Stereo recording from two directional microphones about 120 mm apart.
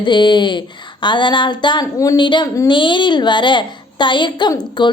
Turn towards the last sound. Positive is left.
turn(degrees=40)  # may be behind; listen again after turning